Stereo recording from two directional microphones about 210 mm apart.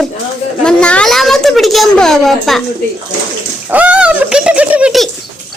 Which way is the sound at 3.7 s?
5° right (ahead or behind).